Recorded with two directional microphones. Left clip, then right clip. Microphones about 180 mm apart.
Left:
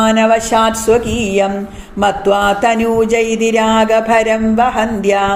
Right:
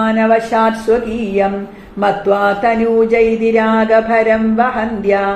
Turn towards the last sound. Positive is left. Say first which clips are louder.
# left 2 dB
turn(degrees=55)  # may be behind; listen again after turning